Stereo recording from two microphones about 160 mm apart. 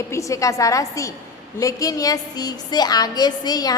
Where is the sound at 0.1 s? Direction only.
20° left (ahead or behind).